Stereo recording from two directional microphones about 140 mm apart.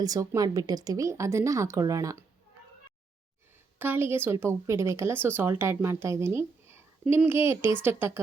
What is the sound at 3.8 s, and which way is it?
A woman's voice, 15° right (ahead or behind).